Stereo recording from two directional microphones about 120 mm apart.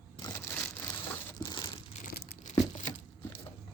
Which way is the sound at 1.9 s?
90° left.